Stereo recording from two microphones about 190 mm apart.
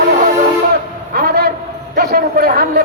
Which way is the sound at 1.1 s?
55° right (ahead or behind).